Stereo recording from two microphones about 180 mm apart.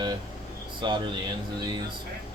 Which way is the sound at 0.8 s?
25° right (ahead or behind).